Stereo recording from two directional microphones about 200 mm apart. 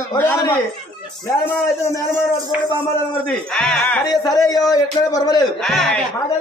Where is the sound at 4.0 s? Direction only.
20° left (ahead or behind).